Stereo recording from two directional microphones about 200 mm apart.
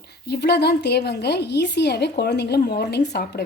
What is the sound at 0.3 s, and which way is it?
A woman's voice, 55° left (ahead or behind).